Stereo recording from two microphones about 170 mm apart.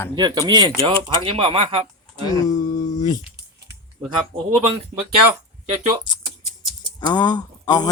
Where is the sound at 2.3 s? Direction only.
25° left (ahead or behind).